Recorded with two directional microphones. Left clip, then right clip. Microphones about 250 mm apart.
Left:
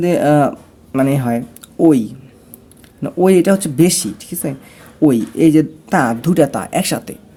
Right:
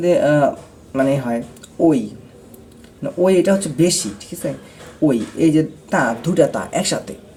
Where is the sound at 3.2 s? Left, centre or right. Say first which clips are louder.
Left 3 dB; left.